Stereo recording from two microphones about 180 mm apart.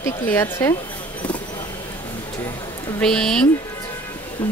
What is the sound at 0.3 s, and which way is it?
Speech, 15° left (ahead or behind).